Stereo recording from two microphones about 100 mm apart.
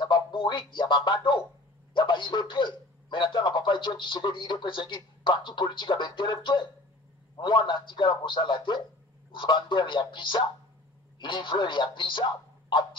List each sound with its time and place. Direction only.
0.0 s a man's voice: 55° left (ahead or behind)